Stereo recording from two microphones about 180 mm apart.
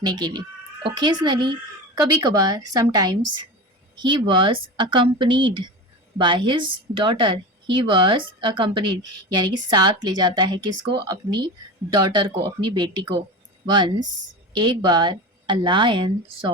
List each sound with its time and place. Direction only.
0.0 s a woman's voice: 20° right (ahead or behind)